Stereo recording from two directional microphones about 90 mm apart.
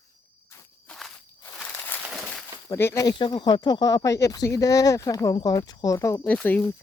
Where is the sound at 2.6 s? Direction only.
30° left (ahead or behind).